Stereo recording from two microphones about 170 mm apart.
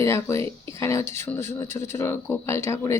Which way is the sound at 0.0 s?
15° left (ahead or behind).